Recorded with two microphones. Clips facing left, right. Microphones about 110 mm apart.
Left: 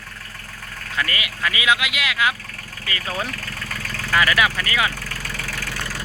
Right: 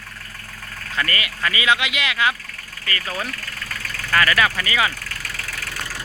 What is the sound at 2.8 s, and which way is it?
Speech, 15° left (ahead or behind).